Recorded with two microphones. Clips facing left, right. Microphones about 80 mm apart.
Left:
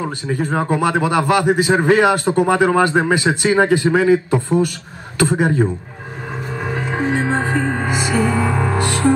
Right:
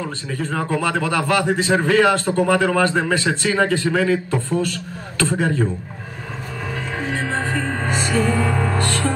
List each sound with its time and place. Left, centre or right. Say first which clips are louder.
0.0 s a man's voice: left 5 dB; left
6.7 s music: left 6 dB; left